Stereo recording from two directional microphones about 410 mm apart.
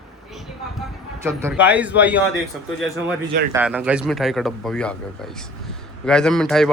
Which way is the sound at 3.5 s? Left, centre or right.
Centre.